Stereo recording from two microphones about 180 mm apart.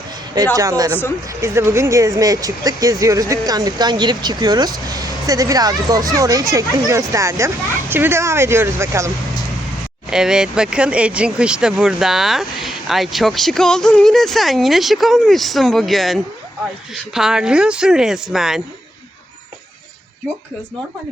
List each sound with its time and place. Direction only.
0.5 s speech: 20° right (ahead or behind)
10.1 s speech: 5° right (ahead or behind)